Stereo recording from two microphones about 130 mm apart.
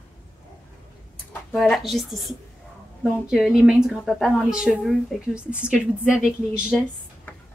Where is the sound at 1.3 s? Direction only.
10° left (ahead or behind); by 6.3 s 10° right (ahead or behind).